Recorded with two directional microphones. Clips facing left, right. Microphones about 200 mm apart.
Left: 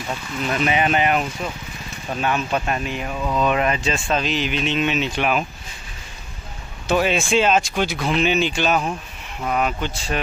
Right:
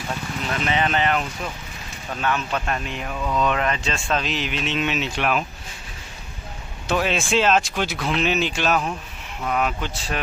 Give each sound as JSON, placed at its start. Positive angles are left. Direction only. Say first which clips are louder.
{"t": 0.7, "sound": "speech", "louder": "left 2 dB", "side_deg": 15}
{"t": 2.2, "sound": "speech", "louder": "left 2 dB", "side_deg": 15}
{"t": 6.9, "sound": "speech", "louder": "left 3 dB", "side_deg": 5}